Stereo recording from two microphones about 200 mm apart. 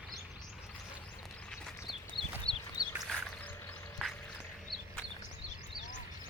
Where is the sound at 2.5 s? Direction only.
30° left (ahead or behind).